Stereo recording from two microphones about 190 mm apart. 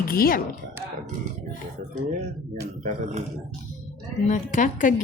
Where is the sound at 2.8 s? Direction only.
40° right (ahead or behind).